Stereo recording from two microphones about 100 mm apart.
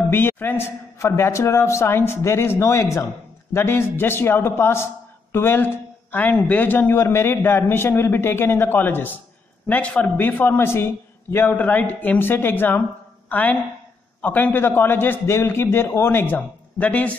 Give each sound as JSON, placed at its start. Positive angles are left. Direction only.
{"t": 0.1, "sound": "a man's voice", "side_deg": 20}